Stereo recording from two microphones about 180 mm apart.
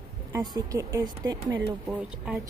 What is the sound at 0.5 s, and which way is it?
A woman's voice, 20° right (ahead or behind).